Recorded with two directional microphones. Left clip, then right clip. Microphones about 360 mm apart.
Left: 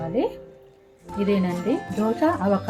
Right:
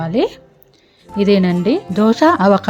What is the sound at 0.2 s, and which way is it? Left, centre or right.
Speech, right.